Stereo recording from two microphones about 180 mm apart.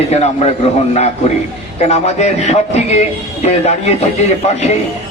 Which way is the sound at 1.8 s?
35° left (ahead or behind).